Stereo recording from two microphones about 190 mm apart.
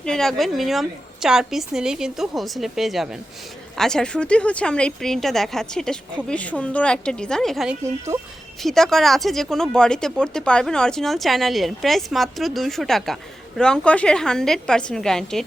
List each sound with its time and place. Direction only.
0.0 s speech: 5° left (ahead or behind)
8.1 s speech: 15° right (ahead or behind)
8.6 s speech: centre (ahead or behind)